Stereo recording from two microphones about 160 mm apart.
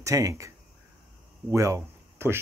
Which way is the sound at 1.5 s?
20° right (ahead or behind).